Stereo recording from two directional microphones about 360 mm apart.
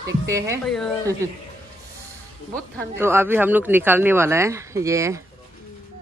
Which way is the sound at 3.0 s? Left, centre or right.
Centre.